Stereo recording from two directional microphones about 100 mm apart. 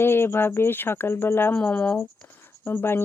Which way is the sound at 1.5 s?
10° left (ahead or behind).